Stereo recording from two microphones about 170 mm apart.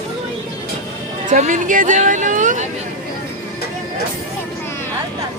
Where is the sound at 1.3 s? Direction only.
50° right (ahead or behind).